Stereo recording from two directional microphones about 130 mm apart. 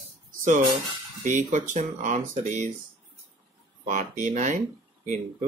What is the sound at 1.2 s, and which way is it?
Speech, 75° right (ahead or behind).